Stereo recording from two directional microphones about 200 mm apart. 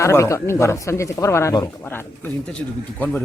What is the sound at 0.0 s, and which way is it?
Speech, 15° left (ahead or behind).